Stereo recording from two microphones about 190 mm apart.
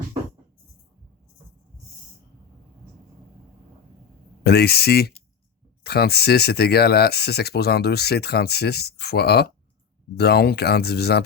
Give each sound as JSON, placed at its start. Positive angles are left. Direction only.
{"t": 4.4, "sound": "speech", "side_deg": 60}